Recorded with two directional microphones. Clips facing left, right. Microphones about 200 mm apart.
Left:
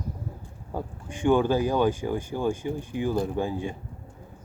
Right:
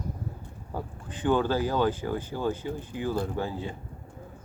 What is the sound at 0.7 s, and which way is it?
Speech, 15° left (ahead or behind).